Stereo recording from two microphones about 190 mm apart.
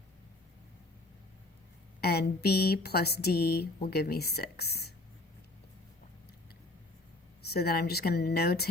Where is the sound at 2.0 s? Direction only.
55° left (ahead or behind).